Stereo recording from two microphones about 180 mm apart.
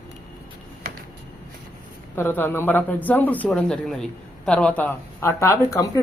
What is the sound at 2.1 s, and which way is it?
Speech, 10° left (ahead or behind).